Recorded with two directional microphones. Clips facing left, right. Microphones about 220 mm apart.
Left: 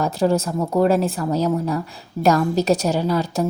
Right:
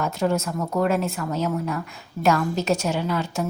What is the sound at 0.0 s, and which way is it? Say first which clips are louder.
Speech: left 4 dB; 35° left (ahead or behind).